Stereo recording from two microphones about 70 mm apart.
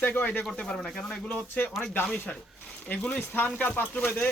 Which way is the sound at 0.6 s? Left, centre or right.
Centre.